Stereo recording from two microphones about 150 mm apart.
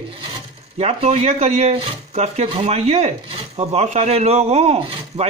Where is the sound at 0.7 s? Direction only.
40° right (ahead or behind).